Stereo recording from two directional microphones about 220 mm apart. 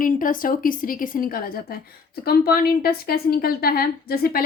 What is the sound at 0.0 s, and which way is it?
A woman's voice, 40° left (ahead or behind).